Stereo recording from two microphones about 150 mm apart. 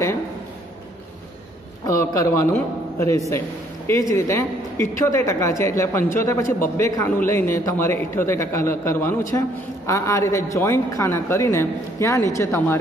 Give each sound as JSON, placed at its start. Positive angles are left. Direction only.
{"t": 1.9, "sound": "a man's voice", "side_deg": 20}